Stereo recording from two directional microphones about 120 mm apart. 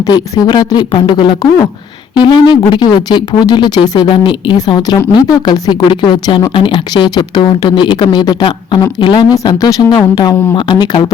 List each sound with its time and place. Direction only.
0.0 s speech: 35° left (ahead or behind)
9.3 s speech: 30° left (ahead or behind)